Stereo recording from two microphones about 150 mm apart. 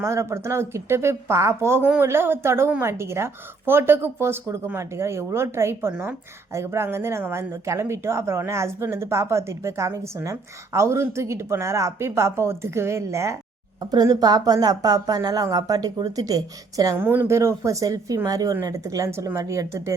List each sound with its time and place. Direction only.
0.0 s speech: 20° right (ahead or behind)